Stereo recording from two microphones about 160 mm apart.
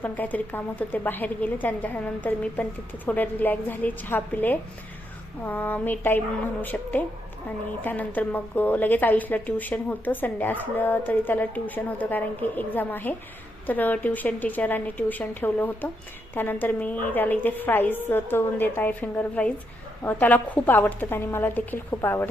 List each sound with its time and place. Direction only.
0.0 s a woman's voice: 10° left (ahead or behind)